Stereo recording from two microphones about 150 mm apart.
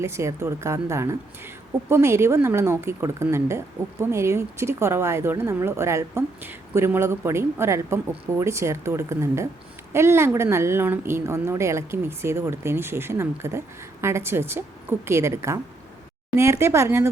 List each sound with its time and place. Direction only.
0.0 s a woman's voice: 20° right (ahead or behind)